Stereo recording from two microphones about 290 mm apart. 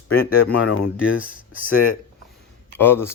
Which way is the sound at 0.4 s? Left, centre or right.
Left.